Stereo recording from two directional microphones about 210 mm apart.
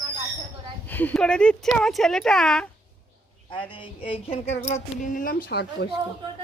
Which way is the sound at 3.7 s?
25° left (ahead or behind).